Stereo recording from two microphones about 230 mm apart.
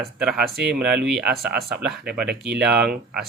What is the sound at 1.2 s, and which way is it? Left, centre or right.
Speech, right.